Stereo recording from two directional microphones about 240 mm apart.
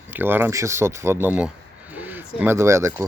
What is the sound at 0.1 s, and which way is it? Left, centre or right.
Speech, centre.